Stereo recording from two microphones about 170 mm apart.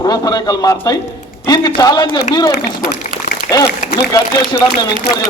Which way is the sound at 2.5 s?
70° left (ahead or behind).